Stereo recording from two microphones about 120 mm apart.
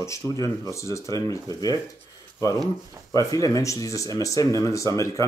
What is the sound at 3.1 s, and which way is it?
Speech, 30° left (ahead or behind).